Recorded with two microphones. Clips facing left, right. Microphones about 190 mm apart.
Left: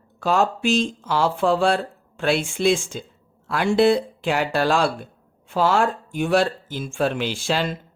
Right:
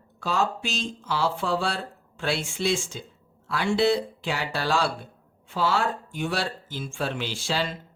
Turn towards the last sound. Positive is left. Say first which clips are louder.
# left 5 dB
turn(degrees=50)  # may be behind; listen again after turning